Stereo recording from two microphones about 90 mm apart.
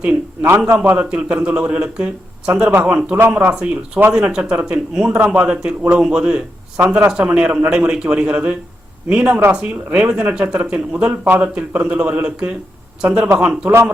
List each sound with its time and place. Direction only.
0.6 s a man's voice: 15° right (ahead or behind)